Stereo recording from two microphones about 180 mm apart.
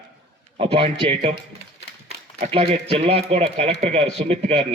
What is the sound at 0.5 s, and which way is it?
Speech, 35° right (ahead or behind).